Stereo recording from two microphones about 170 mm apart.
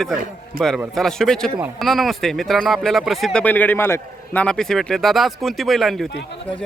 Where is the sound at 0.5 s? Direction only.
60° right (ahead or behind).